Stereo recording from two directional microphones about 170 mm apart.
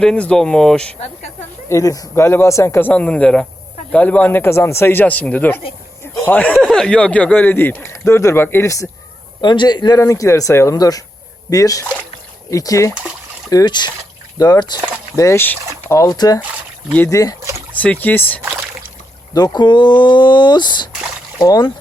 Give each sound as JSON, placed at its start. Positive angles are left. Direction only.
{"t": 0.0, "sound": "speech", "side_deg": 5}
{"t": 0.9, "sound": "speech", "side_deg": 40}
{"t": 1.7, "sound": "speech", "side_deg": 20}
{"t": 12.9, "sound": "speech", "side_deg": -5}
{"t": 13.5, "sound": "speech", "side_deg": 25}
{"t": 17.4, "sound": "boat", "side_deg": -15}
{"t": 17.7, "sound": "speech", "side_deg": 10}
{"t": 19.3, "sound": "speech", "side_deg": 25}